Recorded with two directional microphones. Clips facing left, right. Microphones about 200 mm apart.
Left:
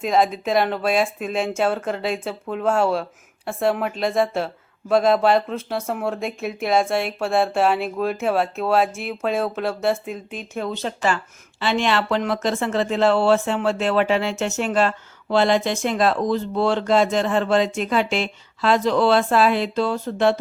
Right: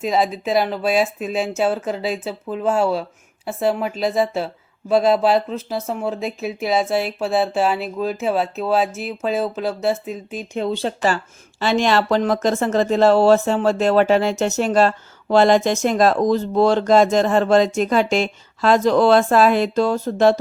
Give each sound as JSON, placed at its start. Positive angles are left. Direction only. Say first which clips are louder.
{"t": 0.0, "sound": "speech", "louder": "even", "side_deg": -5}
{"t": 10.6, "sound": "speech", "louder": "right 4 dB", "side_deg": -30}